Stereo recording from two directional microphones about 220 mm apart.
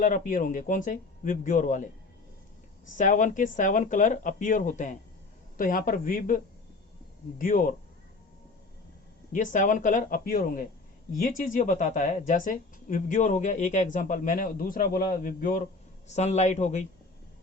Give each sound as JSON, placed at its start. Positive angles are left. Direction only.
{"t": 0.0, "sound": "speech", "side_deg": 35}
{"t": 2.9, "sound": "speech", "side_deg": 35}
{"t": 9.3, "sound": "speech", "side_deg": 35}